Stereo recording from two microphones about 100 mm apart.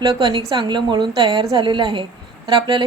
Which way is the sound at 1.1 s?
40° right (ahead or behind).